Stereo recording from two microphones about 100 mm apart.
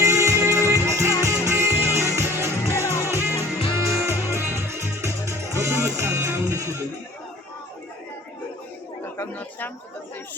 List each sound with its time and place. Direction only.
0.0 s music: 30° right (ahead or behind)
9.1 s speech: 20° left (ahead or behind)